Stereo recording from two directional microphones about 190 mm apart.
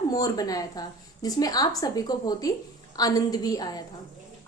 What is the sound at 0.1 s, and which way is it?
A woman's voice, 20° left (ahead or behind).